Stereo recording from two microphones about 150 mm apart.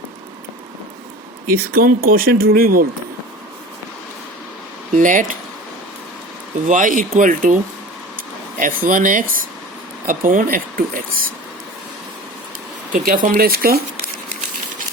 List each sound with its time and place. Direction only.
1.5 s speech: 75° right (ahead or behind)
4.9 s speech: 60° right (ahead or behind)
6.7 s speech: 60° right (ahead or behind)
8.5 s speech: 65° right (ahead or behind)
13.1 s speech: 70° right (ahead or behind)